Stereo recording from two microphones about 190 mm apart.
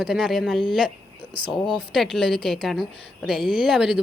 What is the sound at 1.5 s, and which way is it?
A woman's voice, centre (ahead or behind).